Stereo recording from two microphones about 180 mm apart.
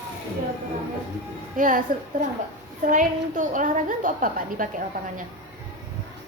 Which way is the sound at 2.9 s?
45° right (ahead or behind).